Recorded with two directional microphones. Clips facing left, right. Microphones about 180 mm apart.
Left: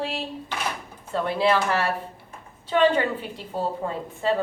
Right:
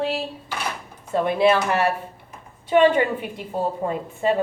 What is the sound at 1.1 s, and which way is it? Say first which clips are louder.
A woman's voice: right 4 dB; 15° right (ahead or behind).